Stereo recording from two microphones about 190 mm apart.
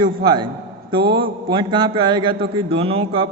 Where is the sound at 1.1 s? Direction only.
25° right (ahead or behind).